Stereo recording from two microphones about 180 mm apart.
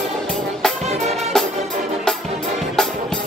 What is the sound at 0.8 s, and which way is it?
Music, 35° right (ahead or behind).